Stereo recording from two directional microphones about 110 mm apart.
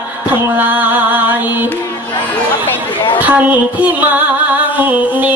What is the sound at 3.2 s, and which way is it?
Music, 15° right (ahead or behind).